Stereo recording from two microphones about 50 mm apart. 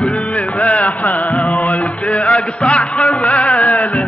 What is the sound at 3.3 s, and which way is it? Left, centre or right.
Music, left.